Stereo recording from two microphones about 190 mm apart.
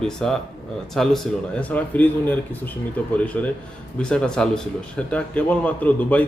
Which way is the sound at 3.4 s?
5° left (ahead or behind).